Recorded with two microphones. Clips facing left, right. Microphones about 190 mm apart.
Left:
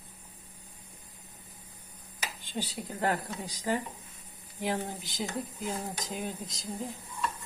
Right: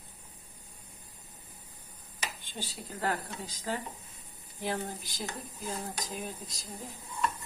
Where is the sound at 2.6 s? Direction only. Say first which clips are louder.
Left 3 dB; 15° left (ahead or behind).